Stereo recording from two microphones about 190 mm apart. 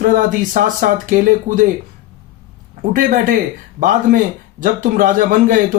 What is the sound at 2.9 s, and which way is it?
A man's voice, 45° right (ahead or behind).